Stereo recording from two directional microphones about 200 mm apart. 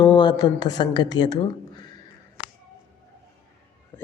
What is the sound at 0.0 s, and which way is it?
A woman's voice, 20° left (ahead or behind).